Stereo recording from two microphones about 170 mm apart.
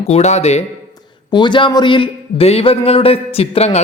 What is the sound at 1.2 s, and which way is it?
Speech, 25° left (ahead or behind).